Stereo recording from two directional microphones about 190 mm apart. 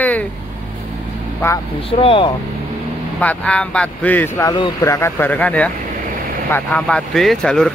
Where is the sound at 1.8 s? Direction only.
30° left (ahead or behind).